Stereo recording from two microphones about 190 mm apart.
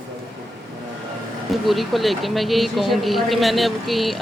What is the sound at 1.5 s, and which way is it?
Speech, centre (ahead or behind).